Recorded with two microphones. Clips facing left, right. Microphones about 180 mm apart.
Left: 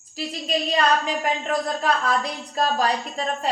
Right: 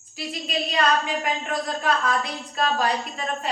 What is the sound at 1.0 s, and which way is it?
A woman's voice, 40° left (ahead or behind).